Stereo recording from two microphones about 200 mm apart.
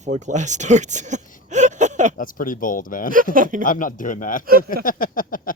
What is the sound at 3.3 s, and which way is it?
Speech, 45° right (ahead or behind).